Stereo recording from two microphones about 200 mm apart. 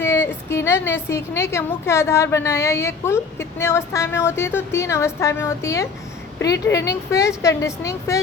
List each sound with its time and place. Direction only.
0.0 s a woman's voice: 15° left (ahead or behind)